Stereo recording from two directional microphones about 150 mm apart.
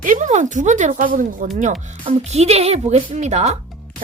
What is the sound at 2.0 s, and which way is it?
A woman's voice, 45° right (ahead or behind).